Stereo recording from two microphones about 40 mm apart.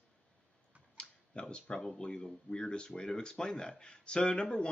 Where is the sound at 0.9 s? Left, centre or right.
Left.